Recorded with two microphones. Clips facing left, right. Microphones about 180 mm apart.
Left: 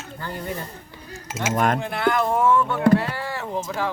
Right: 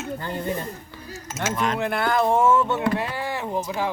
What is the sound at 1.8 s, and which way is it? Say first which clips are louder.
Speech: right 4 dB; 55° right (ahead or behind).